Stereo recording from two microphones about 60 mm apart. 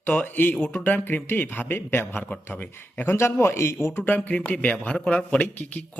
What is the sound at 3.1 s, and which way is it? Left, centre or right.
Speech, left.